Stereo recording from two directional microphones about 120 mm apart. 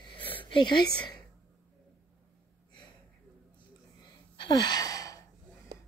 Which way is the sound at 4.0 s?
35° left (ahead or behind).